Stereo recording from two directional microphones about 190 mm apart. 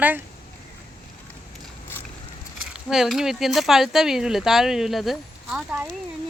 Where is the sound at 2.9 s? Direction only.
Centre (ahead or behind).